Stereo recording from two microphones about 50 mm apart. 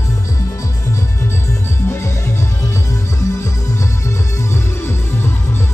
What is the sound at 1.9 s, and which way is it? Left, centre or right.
Music, left.